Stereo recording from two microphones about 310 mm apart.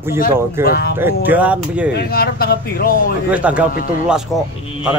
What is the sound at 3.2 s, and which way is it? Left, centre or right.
Speech, centre.